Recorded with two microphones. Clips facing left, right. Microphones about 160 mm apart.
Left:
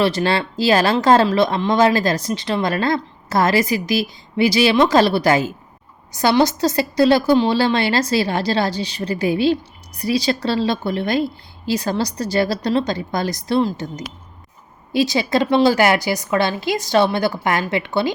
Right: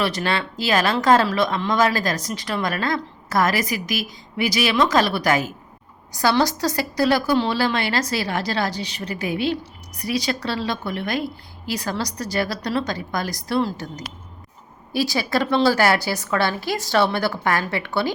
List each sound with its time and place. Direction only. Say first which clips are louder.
0.0 s a woman's voice: left 5 dB; 30° left (ahead or behind)